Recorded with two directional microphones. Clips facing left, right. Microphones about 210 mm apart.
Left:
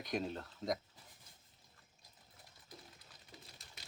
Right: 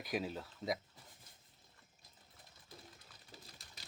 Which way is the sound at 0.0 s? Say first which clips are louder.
Even; 5° right (ahead or behind).